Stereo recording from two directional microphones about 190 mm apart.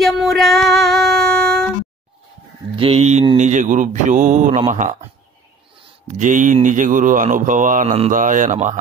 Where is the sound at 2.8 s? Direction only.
30° right (ahead or behind).